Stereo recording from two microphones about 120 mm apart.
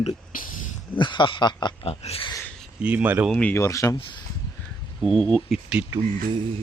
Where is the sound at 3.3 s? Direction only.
10° left (ahead or behind).